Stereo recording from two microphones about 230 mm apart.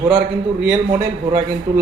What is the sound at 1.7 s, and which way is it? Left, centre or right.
Speech, centre.